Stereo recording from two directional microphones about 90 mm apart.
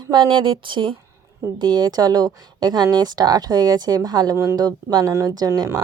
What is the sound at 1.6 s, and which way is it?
Speech, 50° right (ahead or behind).